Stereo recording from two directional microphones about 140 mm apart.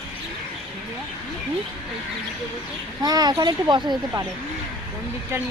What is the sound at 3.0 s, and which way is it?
Speech, 30° right (ahead or behind).